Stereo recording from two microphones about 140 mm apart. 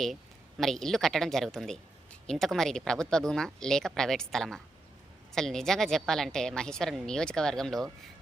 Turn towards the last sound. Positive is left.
turn(degrees=5)  # may be behind; listen again after turning